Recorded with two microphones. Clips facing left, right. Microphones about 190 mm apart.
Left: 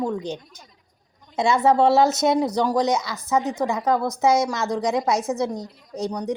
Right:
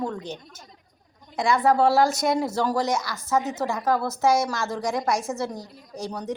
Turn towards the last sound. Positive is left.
turn(degrees=15)  # may be behind; listen again after turning